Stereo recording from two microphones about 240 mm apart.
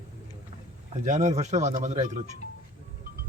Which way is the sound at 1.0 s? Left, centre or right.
Right.